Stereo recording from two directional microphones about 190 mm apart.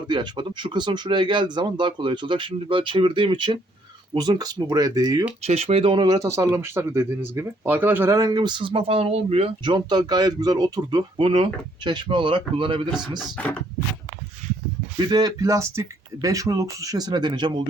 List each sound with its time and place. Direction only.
0.1 s speech: 25° right (ahead or behind)
5.4 s speech: 35° right (ahead or behind)
13.1 s speech: 5° left (ahead or behind)
14.9 s speech: 20° right (ahead or behind)